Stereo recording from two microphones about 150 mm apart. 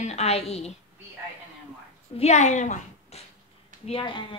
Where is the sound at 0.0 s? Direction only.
45° left (ahead or behind).